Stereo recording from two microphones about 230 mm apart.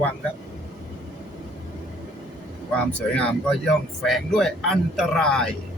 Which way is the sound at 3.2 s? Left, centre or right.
Centre.